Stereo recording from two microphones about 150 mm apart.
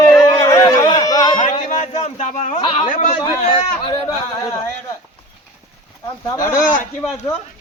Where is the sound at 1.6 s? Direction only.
55° left (ahead or behind); by 2.9 s 35° left (ahead or behind).